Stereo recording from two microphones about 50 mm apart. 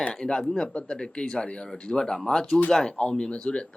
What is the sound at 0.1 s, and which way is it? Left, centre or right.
Speech, centre.